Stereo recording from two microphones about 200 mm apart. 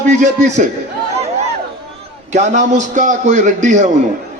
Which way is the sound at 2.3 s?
35° right (ahead or behind).